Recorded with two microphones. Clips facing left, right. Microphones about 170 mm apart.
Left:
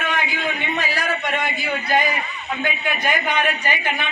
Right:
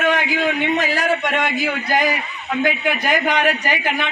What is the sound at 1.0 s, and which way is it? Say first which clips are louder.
A man's voice: right 4 dB; 85° right.